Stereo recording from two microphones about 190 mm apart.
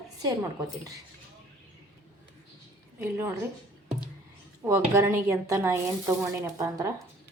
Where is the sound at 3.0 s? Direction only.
10° right (ahead or behind).